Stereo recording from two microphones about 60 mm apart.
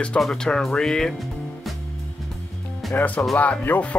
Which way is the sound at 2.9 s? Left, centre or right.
Left.